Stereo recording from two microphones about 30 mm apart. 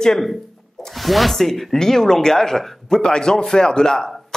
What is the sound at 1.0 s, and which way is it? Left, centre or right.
Speech, centre.